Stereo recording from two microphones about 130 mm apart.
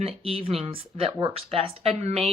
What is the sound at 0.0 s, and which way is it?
Speech, 50° right (ahead or behind).